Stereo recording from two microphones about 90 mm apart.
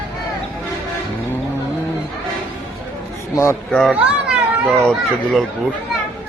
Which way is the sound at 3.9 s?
5° right (ahead or behind).